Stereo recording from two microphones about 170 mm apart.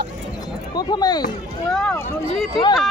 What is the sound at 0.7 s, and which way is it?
Speech, 25° left (ahead or behind).